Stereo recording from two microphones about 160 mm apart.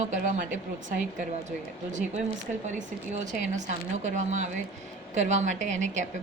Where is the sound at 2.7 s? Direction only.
50° right (ahead or behind).